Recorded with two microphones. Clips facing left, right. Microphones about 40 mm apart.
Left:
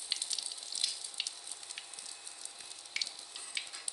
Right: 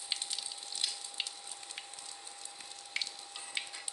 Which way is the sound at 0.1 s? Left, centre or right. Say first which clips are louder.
Even; right.